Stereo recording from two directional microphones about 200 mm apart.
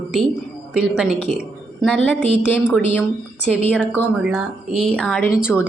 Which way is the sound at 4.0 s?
5° right (ahead or behind).